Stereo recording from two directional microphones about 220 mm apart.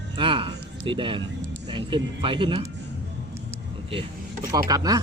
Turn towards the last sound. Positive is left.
turn(degrees=-15)  # may be behind; listen again after turning